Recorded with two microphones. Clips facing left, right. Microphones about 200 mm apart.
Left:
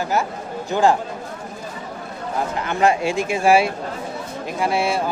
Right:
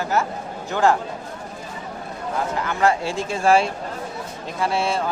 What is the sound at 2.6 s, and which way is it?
Speech, 20° left (ahead or behind).